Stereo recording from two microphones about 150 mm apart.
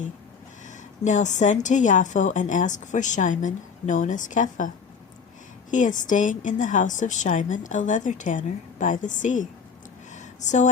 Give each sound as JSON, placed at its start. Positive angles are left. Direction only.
{"t": 0.7, "sound": "a woman's voice", "side_deg": 55}
{"t": 5.7, "sound": "a woman's voice", "side_deg": 55}
{"t": 10.1, "sound": "a sound", "side_deg": 55}